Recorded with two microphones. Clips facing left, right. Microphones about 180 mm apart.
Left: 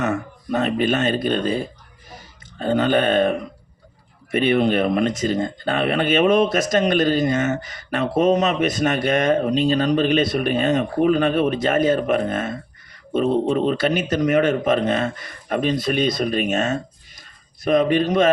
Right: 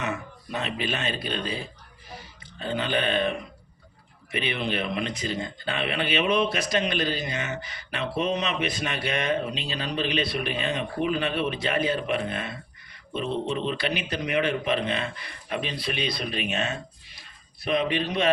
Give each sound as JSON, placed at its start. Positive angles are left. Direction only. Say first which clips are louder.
{"t": 0.0, "sound": "speech", "louder": "left 8 dB", "side_deg": 45}